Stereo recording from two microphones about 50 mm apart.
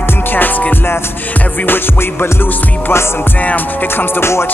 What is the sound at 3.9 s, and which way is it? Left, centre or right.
Music, left.